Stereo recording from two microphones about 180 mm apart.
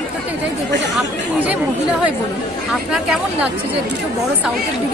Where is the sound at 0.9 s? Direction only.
5° right (ahead or behind).